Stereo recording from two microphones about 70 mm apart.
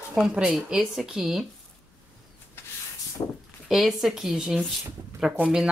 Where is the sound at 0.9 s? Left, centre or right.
Centre.